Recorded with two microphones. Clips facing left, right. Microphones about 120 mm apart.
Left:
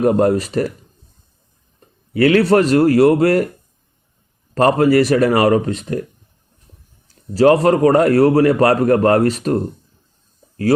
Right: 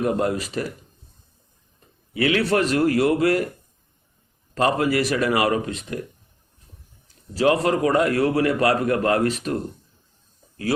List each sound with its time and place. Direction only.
0.0 s speech: 45° left (ahead or behind)
2.1 s a man's voice: 45° left (ahead or behind)
4.5 s a man's voice: 45° left (ahead or behind)
7.3 s a man's voice: 40° left (ahead or behind)